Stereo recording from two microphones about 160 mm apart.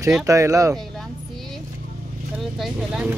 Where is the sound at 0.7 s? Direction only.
Centre (ahead or behind).